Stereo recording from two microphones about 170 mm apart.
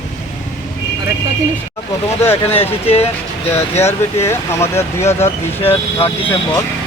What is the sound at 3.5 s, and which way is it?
Speech, 15° left (ahead or behind).